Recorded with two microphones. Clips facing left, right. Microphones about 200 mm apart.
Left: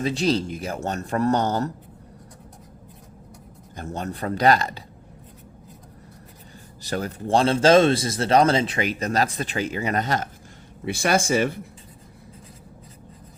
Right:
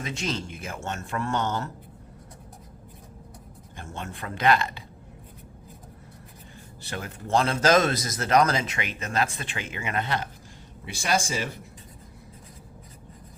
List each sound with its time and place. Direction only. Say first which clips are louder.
0.0 s speech: left 9 dB; 35° left (ahead or behind)
3.8 s speech: left 7 dB; 40° left (ahead or behind)
6.8 s speech: left 8 dB; 40° left (ahead or behind)
10.8 s speech: left 6 dB; 55° left (ahead or behind)